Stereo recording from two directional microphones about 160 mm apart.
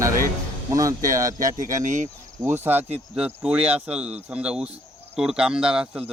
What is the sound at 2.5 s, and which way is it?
Speech, 10° right (ahead or behind).